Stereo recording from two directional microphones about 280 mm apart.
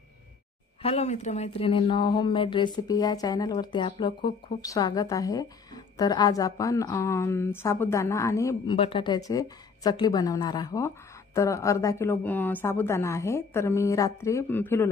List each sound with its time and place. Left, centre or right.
0.8 s a woman's voice: left